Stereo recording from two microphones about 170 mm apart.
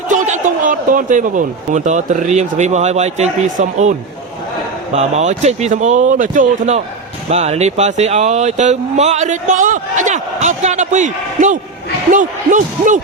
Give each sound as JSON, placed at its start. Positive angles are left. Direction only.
{"t": 0.1, "sound": "speech", "side_deg": -50}
{"t": 4.9, "sound": "speech", "side_deg": -40}